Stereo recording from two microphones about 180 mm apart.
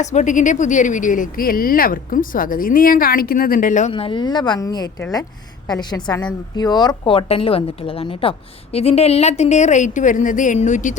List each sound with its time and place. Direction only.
0.0 s speech: 40° left (ahead or behind)
3.9 s a woman's voice: 30° left (ahead or behind); by 10.9 s 45° left (ahead or behind)